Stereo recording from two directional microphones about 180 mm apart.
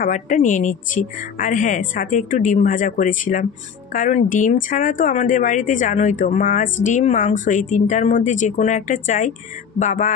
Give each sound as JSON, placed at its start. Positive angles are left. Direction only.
{"t": 0.0, "sound": "speech", "side_deg": 45}